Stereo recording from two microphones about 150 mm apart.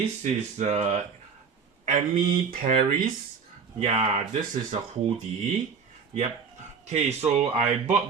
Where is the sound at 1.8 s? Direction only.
60° right (ahead or behind).